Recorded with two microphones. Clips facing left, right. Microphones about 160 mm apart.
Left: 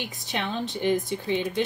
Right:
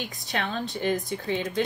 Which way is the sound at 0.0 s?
15° left (ahead or behind).